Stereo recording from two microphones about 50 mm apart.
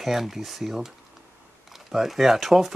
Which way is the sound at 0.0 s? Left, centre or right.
Centre.